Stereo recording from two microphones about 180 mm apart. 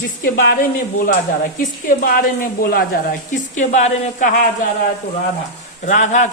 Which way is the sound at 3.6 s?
40° left (ahead or behind).